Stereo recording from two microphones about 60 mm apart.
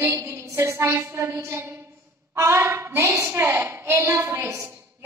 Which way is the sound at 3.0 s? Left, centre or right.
Right.